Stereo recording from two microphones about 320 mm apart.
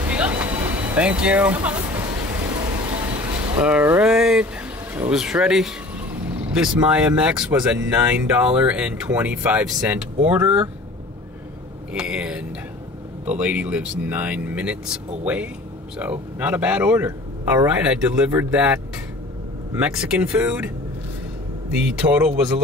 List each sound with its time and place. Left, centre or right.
0.0 s music: centre
3.5 s speech: centre
11.9 s a sound: centre
13.2 s speech: centre